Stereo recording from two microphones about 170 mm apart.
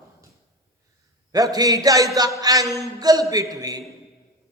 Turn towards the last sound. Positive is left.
turn(degrees=-20)  # may be behind; listen again after turning